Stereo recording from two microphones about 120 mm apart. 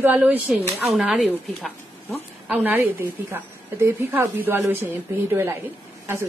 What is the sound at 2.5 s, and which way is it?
A woman's voice, 15° right (ahead or behind).